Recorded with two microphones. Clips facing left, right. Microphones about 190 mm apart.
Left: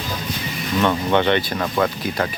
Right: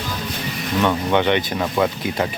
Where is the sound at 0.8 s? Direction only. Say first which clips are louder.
Even; 10° right (ahead or behind).